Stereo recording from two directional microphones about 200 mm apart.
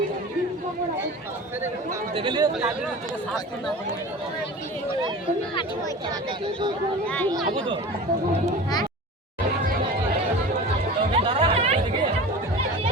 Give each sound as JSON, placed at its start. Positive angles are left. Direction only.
{"t": 2.1, "sound": "speech", "side_deg": -25}
{"t": 11.1, "sound": "chatter", "side_deg": -30}